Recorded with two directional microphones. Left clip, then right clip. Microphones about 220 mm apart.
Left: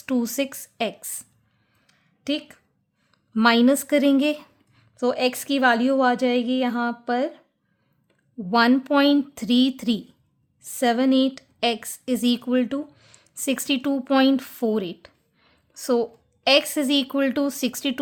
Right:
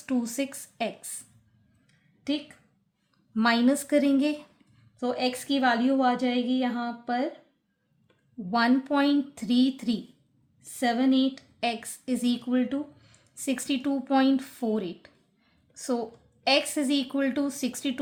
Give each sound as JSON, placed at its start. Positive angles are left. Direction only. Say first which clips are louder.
{"t": 0.0, "sound": "a woman's voice", "louder": "left 5 dB", "side_deg": 40}
{"t": 1.9, "sound": "a sound", "louder": "left 4 dB", "side_deg": 50}
{"t": 3.3, "sound": "a woman's voice", "louder": "left 6 dB", "side_deg": 40}
{"t": 8.4, "sound": "a woman's voice", "louder": "left 6 dB", "side_deg": 45}